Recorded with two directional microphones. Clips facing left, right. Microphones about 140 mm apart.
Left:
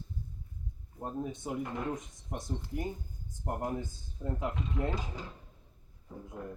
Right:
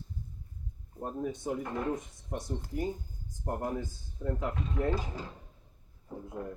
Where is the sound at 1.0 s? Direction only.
20° left (ahead or behind).